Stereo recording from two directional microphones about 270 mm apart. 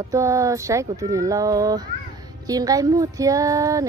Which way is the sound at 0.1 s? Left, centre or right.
Centre.